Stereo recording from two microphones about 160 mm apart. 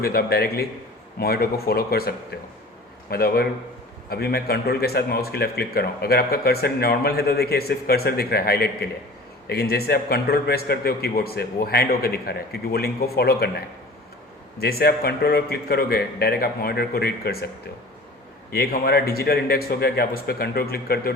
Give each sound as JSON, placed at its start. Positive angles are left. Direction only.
{"t": 0.0, "sound": "a man's voice", "side_deg": 75}
{"t": 14.6, "sound": "a man's voice", "side_deg": 75}
{"t": 18.5, "sound": "a man's voice", "side_deg": 70}